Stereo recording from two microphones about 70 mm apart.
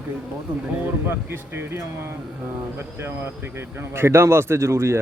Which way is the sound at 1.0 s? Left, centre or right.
Right.